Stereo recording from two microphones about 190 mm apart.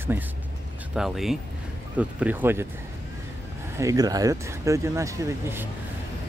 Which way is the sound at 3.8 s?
20° right (ahead or behind).